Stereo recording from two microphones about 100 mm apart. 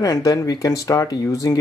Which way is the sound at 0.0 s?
35° left (ahead or behind).